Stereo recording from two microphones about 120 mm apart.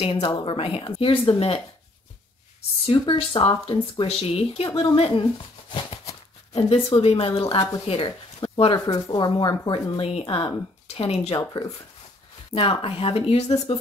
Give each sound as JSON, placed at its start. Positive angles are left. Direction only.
{"t": 0.0, "sound": "speech", "side_deg": 55}
{"t": 2.9, "sound": "speech", "side_deg": 45}
{"t": 5.7, "sound": "a sound", "side_deg": 55}
{"t": 7.0, "sound": "speech", "side_deg": 55}
{"t": 7.4, "sound": "speech", "side_deg": 35}
{"t": 7.8, "sound": "speech", "side_deg": 55}
{"t": 8.4, "sound": "a sound", "side_deg": 55}
{"t": 8.7, "sound": "speech", "side_deg": 35}
{"t": 11.3, "sound": "speech", "side_deg": 35}
{"t": 12.5, "sound": "speech", "side_deg": 55}